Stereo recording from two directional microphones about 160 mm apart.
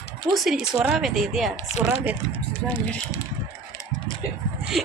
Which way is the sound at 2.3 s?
10° left (ahead or behind).